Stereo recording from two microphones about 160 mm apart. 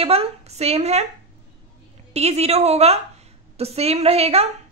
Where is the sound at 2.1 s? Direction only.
40° right (ahead or behind).